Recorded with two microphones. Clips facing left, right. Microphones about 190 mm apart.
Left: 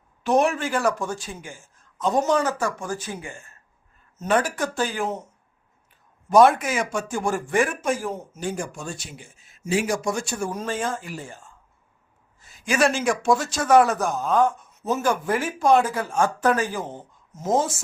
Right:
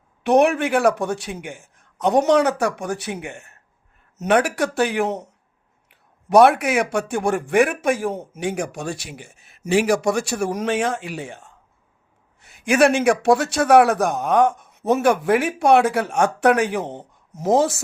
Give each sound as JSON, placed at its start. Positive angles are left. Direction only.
{"t": 0.2, "sound": "a man's voice", "side_deg": -65}